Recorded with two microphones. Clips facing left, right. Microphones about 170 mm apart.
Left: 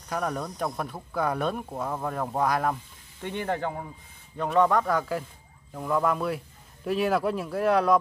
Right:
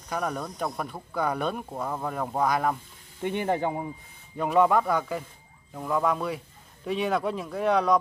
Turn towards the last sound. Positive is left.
turn(degrees=5)  # may be behind; listen again after turning